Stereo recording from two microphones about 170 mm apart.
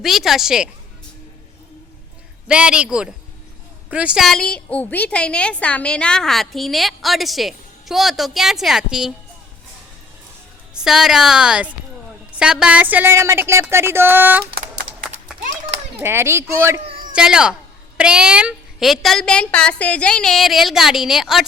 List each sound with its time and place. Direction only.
0.0 s a woman's voice: centre (ahead or behind)
2.5 s a woman's voice: 5° right (ahead or behind)
10.8 s a woman's voice: 5° right (ahead or behind)
16.0 s speech: 15° right (ahead or behind)
17.2 s a woman's voice: 5° right (ahead or behind)